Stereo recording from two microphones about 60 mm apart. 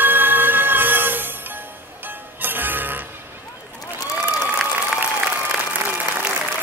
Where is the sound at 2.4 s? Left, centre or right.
Right.